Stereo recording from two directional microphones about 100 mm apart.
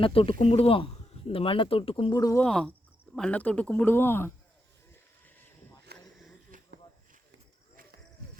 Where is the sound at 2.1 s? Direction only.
35° left (ahead or behind).